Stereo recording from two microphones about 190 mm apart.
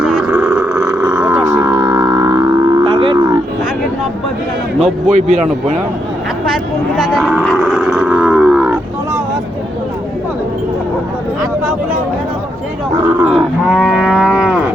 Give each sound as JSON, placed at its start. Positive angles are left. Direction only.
{"t": 0.0, "sound": "a sound", "side_deg": -5}
{"t": 1.6, "sound": "livestock", "side_deg": -25}
{"t": 5.0, "sound": "speech", "side_deg": -40}
{"t": 6.5, "sound": "livestock", "side_deg": 0}
{"t": 7.4, "sound": "a sound", "side_deg": 5}
{"t": 8.0, "sound": "cattle", "side_deg": -5}
{"t": 13.2, "sound": "livestock", "side_deg": 0}